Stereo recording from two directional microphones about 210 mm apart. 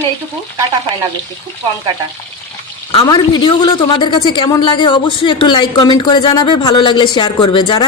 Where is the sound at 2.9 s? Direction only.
20° left (ahead or behind).